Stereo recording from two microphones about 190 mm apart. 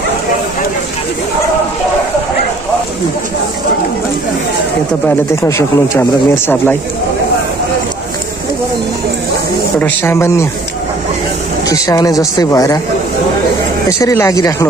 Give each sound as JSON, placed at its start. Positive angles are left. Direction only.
{"t": 5.0, "sound": "speech", "side_deg": 15}
{"t": 9.8, "sound": "speech", "side_deg": 10}
{"t": 11.6, "sound": "speech", "side_deg": 15}
{"t": 13.8, "sound": "speech", "side_deg": 15}